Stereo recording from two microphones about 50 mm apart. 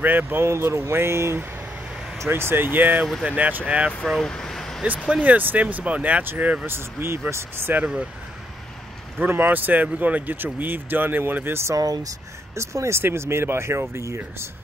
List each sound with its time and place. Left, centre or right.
0.0 s speech: right
0.4 s speech: right
4.2 s vehicle: centre
5.2 s speech: right
6.6 s speech: right
7.8 s speech: centre
9.3 s speech: right
12.5 s speech: right
13.0 s speech: right